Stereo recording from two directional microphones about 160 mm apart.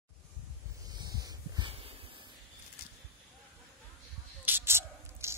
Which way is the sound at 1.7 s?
35° right (ahead or behind).